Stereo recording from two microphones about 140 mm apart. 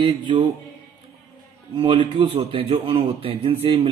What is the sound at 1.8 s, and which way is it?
A man's voice, 35° right (ahead or behind).